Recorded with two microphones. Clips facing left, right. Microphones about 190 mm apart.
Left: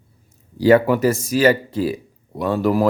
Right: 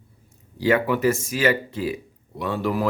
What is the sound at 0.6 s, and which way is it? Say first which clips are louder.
Speech: left 6 dB; 40° left (ahead or behind).